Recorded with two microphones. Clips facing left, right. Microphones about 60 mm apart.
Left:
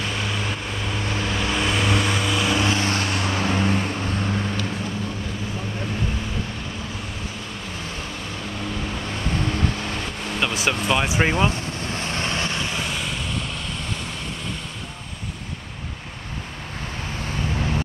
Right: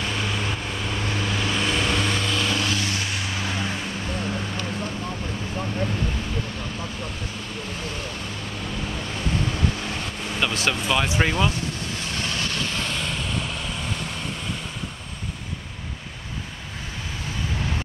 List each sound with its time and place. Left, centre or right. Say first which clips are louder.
0.0 s vehicle: even; centre
2.6 s vehicle: left 4 dB; left
10.4 s speech: left 1 dB; centre
11.9 s vehicle: left 3 dB; left; by 13.6 s centre